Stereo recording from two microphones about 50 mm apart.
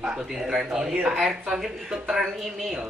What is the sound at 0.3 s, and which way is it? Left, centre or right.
Speech, centre.